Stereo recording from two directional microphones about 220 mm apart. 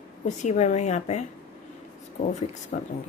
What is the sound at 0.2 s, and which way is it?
A woman's voice, 30° left (ahead or behind).